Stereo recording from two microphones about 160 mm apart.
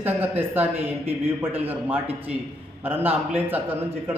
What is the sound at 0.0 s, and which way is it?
A man's voice, 10° right (ahead or behind).